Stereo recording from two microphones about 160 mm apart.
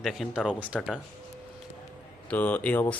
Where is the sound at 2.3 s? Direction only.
10° left (ahead or behind).